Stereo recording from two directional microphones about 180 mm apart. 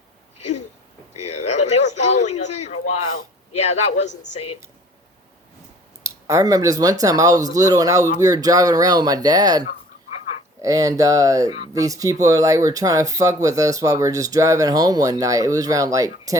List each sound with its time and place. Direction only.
1.5 s a man's voice: 40° left (ahead or behind)
6.2 s speech: 20° right (ahead or behind)